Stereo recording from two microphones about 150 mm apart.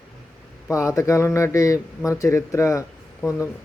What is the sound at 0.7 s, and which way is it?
Speech, 20° left (ahead or behind).